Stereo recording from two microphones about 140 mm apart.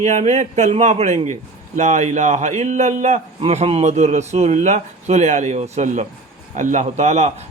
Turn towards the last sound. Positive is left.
turn(degrees=-50)  # may be behind; listen again after turning